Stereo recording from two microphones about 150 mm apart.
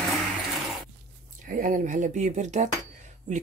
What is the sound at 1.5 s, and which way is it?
Speech, 65° right (ahead or behind).